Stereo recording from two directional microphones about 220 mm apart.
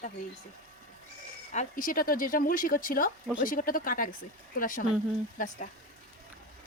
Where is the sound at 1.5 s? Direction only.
40° left (ahead or behind).